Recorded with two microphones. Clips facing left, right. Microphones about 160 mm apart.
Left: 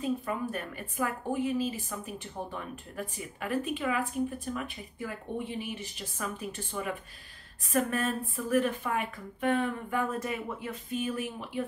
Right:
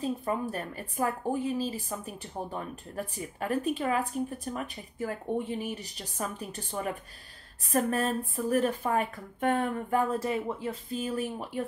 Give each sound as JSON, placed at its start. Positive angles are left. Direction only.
{"t": 0.0, "sound": "speech", "side_deg": -30}